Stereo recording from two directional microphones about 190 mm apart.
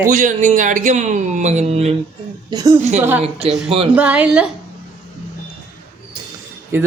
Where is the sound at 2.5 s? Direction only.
20° right (ahead or behind).